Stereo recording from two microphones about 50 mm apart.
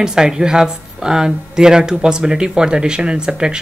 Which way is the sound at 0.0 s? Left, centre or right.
Centre.